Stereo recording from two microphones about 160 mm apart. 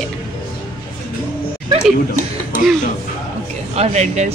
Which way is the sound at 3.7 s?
45° right (ahead or behind).